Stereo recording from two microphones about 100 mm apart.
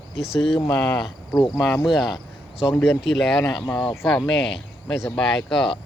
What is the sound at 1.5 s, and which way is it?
Speech, centre (ahead or behind).